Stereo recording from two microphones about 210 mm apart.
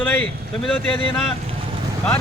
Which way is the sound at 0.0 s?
10° left (ahead or behind).